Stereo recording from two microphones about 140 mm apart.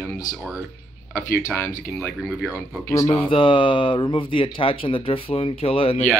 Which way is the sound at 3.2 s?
40° left (ahead or behind).